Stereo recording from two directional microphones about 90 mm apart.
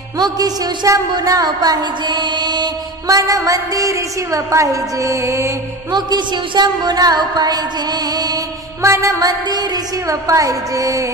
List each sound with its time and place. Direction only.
0.2 s a woman's voice: 40° right (ahead or behind)
3.2 s a woman's voice: 35° right (ahead or behind)
5.9 s a woman's voice: 55° right (ahead or behind)
8.8 s a woman's voice: 30° right (ahead or behind)